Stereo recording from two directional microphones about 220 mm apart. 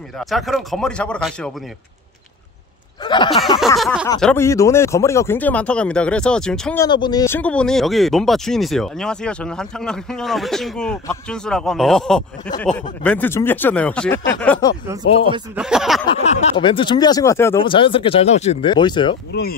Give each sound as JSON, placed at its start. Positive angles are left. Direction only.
{"t": 0.2, "sound": "speech", "side_deg": 0}
{"t": 3.0, "sound": "a sound", "side_deg": 20}
{"t": 3.3, "sound": "speech", "side_deg": 0}
{"t": 4.2, "sound": "speech", "side_deg": 10}
{"t": 6.8, "sound": "speech", "side_deg": 20}
{"t": 15.5, "sound": "speech", "side_deg": -5}
{"t": 16.1, "sound": "speech", "side_deg": 25}
{"t": 17.6, "sound": "speech", "side_deg": 25}